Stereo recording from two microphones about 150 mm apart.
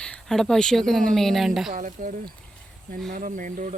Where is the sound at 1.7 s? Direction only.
65° right (ahead or behind).